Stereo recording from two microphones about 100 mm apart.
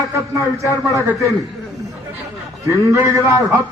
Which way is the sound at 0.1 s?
30° right (ahead or behind).